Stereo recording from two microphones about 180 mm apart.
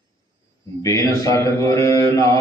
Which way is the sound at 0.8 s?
15° left (ahead or behind).